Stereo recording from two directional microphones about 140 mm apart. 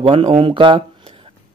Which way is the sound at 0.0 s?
45° right (ahead or behind).